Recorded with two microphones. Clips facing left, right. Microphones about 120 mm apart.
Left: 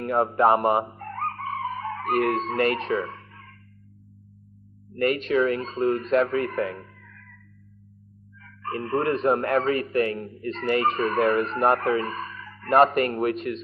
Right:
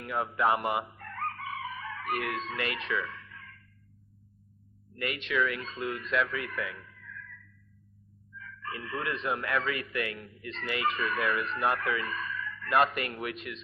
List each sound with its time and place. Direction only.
0.0 s chicken: 45° left (ahead or behind)
4.9 s speech: 40° left (ahead or behind)